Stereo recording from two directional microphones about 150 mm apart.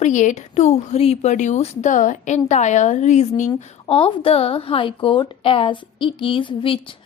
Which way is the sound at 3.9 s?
40° left (ahead or behind).